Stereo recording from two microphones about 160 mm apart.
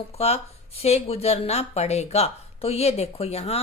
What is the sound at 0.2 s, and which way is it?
Speech, 40° left (ahead or behind).